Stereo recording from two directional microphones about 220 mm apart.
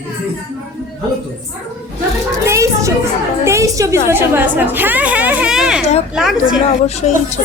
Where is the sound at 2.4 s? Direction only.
15° right (ahead or behind).